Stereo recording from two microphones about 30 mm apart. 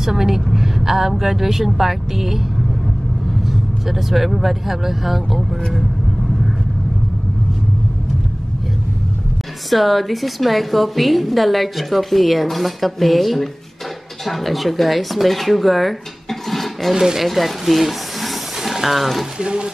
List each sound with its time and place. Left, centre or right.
0.0 s speech: centre
3.4 s a woman's voice: centre
9.7 s a woman's voice: centre
16.9 s speech: centre
17.2 s a sound: centre
19.3 s speech: right